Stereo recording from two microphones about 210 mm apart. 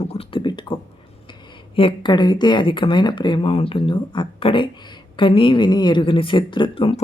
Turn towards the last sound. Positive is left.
turn(degrees=25)  # may be behind; listen again after turning